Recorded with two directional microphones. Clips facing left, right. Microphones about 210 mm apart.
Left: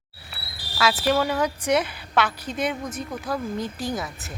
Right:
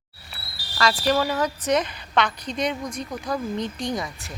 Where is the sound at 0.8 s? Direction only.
5° left (ahead or behind).